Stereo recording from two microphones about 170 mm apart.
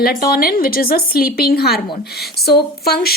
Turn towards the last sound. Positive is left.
turn(degrees=65)  # may be behind; listen again after turning